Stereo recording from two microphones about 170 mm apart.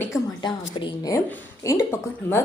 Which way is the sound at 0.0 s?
15° left (ahead or behind).